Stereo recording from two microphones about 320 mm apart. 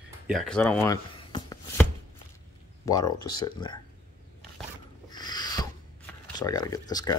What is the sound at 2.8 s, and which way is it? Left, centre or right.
Speech, centre.